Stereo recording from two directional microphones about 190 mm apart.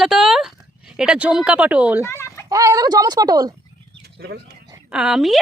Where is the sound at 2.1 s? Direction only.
15° left (ahead or behind).